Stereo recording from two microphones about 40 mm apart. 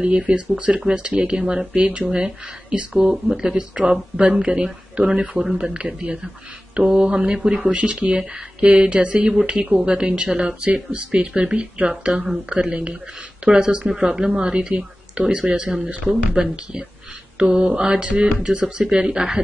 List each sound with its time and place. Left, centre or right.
0.0 s speech: right
13.8 s speech: centre; by 16.4 s right
17.5 s speech: right